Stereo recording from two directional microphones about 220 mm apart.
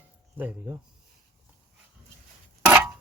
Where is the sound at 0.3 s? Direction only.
10° right (ahead or behind).